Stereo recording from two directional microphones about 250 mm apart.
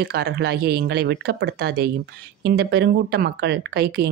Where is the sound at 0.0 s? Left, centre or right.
Right.